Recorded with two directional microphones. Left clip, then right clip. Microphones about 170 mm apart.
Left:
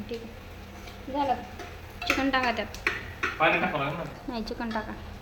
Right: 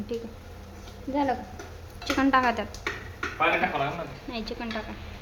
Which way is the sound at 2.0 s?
20° right (ahead or behind).